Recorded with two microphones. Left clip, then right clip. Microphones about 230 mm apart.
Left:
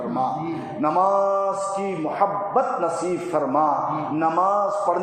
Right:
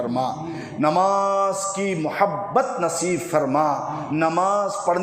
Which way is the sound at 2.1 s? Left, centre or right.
Right.